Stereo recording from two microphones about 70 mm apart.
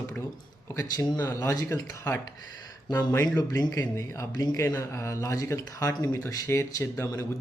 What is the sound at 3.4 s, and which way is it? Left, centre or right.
Speech, left.